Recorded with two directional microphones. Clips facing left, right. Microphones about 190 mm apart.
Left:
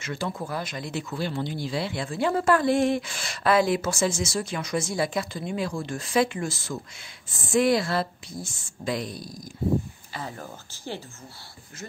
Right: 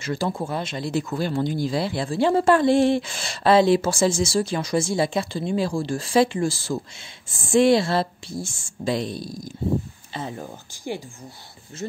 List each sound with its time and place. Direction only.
0.0 s speech: 35° right (ahead or behind); by 11.0 s 15° right (ahead or behind)